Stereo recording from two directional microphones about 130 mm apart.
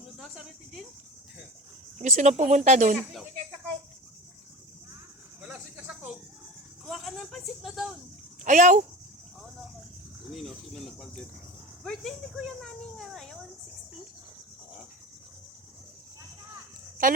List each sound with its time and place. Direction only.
0.2 s speech: centre (ahead or behind)
2.0 s speech: 65° right (ahead or behind)
5.4 s cricket: 10° right (ahead or behind)
6.8 s speech: centre (ahead or behind)
8.4 s speech: 70° right (ahead or behind)
10.3 s speech: centre (ahead or behind)
17.0 s speech: 90° right